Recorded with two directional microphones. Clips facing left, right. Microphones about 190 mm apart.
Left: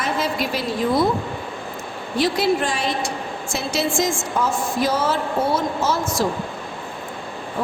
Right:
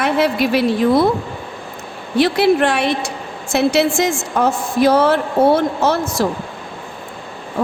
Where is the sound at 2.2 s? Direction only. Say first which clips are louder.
Right 6 dB; 65° right (ahead or behind).